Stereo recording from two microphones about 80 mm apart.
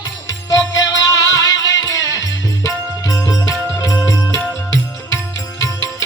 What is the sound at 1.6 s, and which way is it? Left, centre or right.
Music, left.